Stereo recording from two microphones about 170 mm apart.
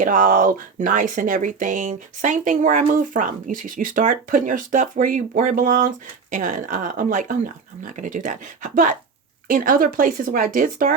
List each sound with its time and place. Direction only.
0.0 s speech: 50° right (ahead or behind)